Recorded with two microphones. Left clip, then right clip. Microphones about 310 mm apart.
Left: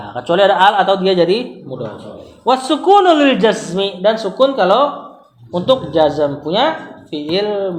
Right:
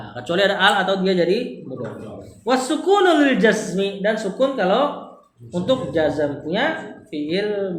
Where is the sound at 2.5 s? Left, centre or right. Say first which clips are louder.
Left 7 dB; centre.